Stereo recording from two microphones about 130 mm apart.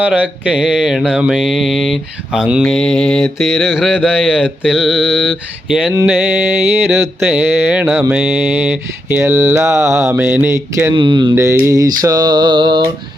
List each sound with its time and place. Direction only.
0.0 s mantra: 10° right (ahead or behind)
6.1 s speech: 10° right (ahead or behind)
10.9 s music: 35° right (ahead or behind)
11.3 s mantra: 20° right (ahead or behind)
12.0 s music: 30° right (ahead or behind)